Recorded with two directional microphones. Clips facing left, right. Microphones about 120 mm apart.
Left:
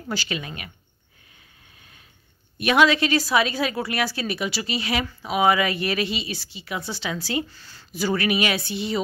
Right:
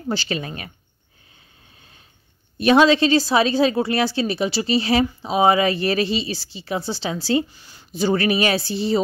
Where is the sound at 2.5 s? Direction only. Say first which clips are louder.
Right 4 dB; 30° right (ahead or behind).